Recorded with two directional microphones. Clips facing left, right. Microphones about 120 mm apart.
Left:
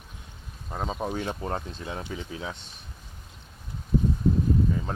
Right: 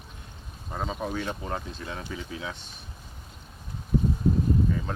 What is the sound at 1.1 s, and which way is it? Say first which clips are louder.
Speech: left 1 dB; 30° left (ahead or behind).